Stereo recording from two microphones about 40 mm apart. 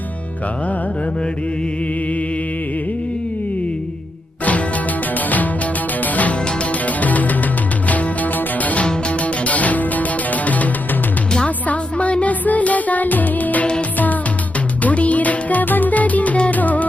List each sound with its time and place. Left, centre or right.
5.1 s music: left
14.8 s music: left